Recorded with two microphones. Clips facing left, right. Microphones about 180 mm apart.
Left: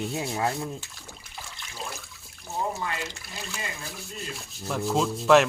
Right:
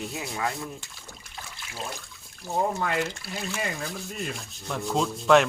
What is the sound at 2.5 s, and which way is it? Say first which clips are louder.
Speech: right 4 dB; 60° right (ahead or behind).